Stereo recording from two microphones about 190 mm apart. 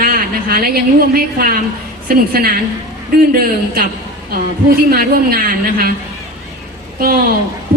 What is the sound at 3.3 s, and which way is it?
Speech, 50° right (ahead or behind).